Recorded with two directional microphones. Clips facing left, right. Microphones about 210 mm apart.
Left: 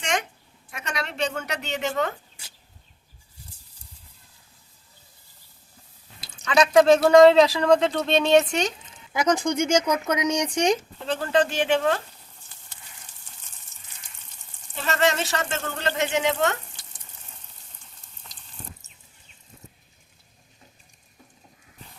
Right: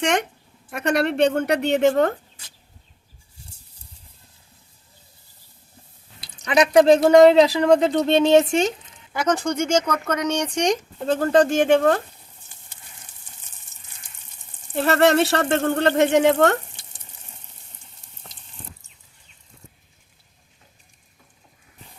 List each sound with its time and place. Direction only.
0.0 s a sound: 60° right (ahead or behind)
0.7 s speech: 55° right (ahead or behind)
6.5 s speech: 20° right (ahead or behind)
9.3 s speech: 10° left (ahead or behind)
11.0 s speech: 45° right (ahead or behind)
14.7 s speech: 60° right (ahead or behind)